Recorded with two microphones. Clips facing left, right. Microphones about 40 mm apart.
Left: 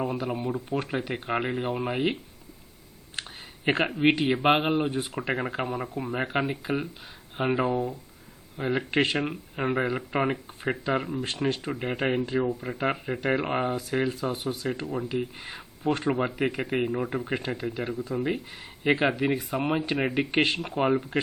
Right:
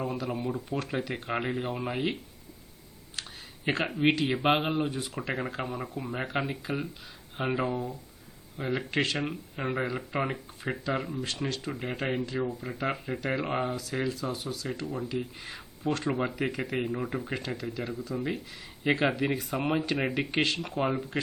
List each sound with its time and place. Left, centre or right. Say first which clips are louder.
0.0 s speech: left 3 dB; centre
0.8 s speech: left 2 dB; centre
3.2 s a sound: left 3 dB; left
3.8 s speech: left 1 dB; centre
4.1 s speech: left 3 dB; left
7.3 s speech: left 4 dB; centre
8.5 s speech: left 4 dB; left
17.2 s speech: left 4 dB; left
19.1 s speech: left 3 dB; centre
20.3 s speech: left 3 dB; left